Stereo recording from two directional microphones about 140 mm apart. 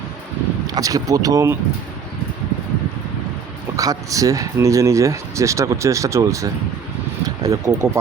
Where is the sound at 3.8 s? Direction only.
25° right (ahead or behind).